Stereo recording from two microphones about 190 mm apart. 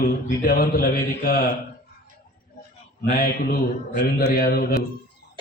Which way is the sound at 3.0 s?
50° left (ahead or behind).